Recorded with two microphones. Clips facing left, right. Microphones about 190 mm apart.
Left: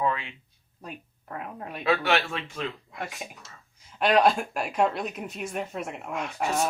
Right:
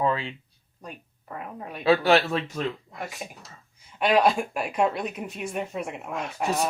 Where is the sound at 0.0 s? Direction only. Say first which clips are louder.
Right 3 dB; 30° right (ahead or behind).